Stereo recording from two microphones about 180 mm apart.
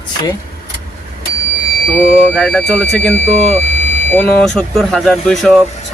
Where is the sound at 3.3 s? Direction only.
40° right (ahead or behind).